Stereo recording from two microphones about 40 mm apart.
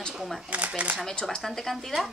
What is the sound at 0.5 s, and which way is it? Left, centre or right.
Speech, right.